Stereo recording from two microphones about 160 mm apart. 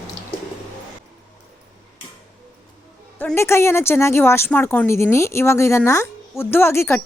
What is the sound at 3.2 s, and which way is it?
A woman's voice, 15° left (ahead or behind).